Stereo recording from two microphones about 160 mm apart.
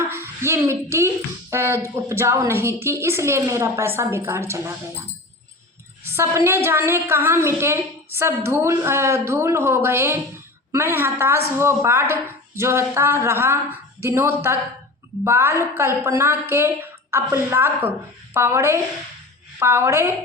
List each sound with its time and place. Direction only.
0.0 s a woman's voice: 15° right (ahead or behind)
6.1 s a woman's voice: 15° right (ahead or behind)